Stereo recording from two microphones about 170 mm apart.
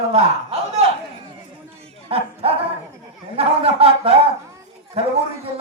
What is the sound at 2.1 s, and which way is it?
Speech, 30° right (ahead or behind).